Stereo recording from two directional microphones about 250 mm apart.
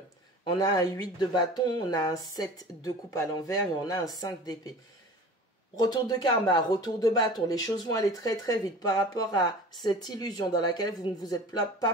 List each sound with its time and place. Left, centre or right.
0.5 s speech: centre
5.8 s speech: centre